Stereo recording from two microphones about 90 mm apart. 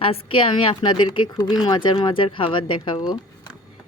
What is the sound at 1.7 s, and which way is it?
Speech, 65° left (ahead or behind).